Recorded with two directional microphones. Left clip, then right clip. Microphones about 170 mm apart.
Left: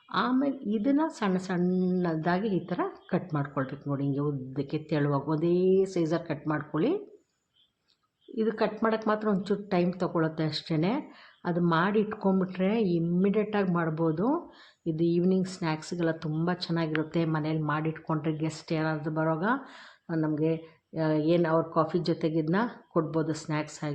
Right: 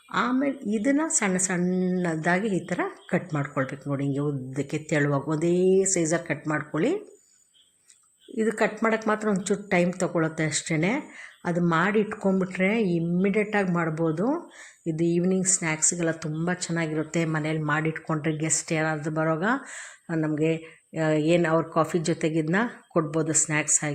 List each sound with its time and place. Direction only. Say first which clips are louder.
0.1 s speech: right 2 dB; 20° right (ahead or behind)
8.4 s speech: right 3 dB; 20° right (ahead or behind)
17.2 s speech: right 3 dB; 25° right (ahead or behind)